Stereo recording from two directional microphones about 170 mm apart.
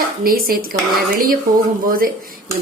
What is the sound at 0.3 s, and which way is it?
Speech, 60° right (ahead or behind).